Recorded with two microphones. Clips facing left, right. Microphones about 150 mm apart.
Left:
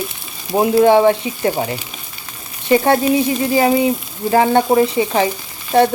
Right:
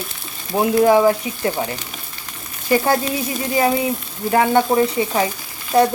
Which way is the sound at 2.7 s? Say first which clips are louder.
Left 4 dB; 25° left (ahead or behind).